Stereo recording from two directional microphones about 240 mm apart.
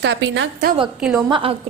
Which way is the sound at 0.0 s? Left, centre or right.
Right.